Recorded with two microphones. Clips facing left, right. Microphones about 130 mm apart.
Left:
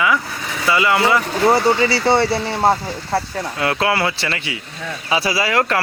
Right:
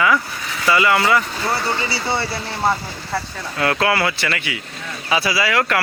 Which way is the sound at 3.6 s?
25° left (ahead or behind).